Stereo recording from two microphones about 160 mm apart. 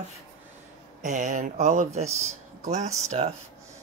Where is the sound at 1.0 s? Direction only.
50° right (ahead or behind).